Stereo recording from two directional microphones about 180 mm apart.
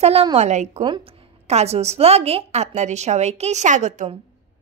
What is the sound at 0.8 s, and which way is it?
A woman's voice, 30° right (ahead or behind).